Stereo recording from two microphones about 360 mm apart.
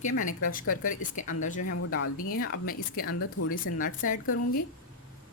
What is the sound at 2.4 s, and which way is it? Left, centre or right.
Speech, left.